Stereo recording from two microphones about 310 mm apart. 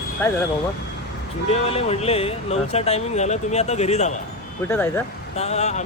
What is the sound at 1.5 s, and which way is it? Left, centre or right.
Speech, left.